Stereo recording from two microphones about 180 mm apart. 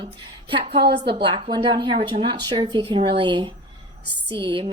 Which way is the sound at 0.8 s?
65° right (ahead or behind).